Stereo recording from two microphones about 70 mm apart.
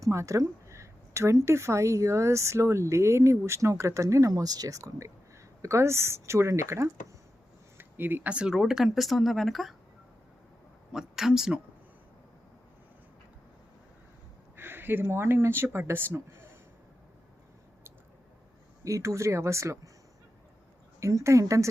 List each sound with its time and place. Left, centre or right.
0.0 s a woman's voice: right
5.6 s speech: right
7.8 s a sound: right
8.3 s speech: centre
10.9 s speech: centre
14.5 s speech: right
18.9 s a woman's voice: right
21.0 s a woman's voice: right